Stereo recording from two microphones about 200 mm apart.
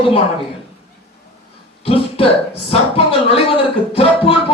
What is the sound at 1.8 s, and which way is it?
A man's voice, 30° left (ahead or behind).